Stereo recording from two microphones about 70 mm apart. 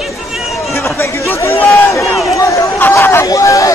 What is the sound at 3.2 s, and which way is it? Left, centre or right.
Speech, left.